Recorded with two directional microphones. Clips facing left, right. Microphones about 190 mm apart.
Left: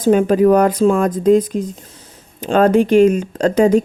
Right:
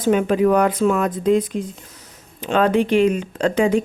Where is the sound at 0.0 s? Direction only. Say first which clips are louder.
Left 4 dB; 40° left (ahead or behind).